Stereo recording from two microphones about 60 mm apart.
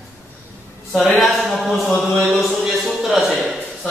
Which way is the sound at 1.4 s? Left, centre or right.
Centre.